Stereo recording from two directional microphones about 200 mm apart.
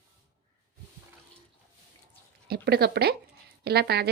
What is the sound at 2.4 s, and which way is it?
A woman's voice, 55° right (ahead or behind).